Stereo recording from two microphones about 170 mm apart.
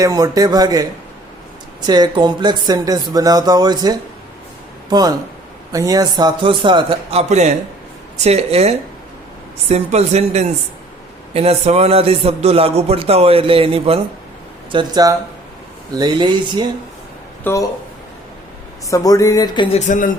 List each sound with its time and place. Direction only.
0.0 s speech: 20° right (ahead or behind)
1.9 s a man's voice: 25° right (ahead or behind)
17.4 s speech: 20° left (ahead or behind)
18.9 s a sound: 20° left (ahead or behind)
19.7 s speech: 45° left (ahead or behind)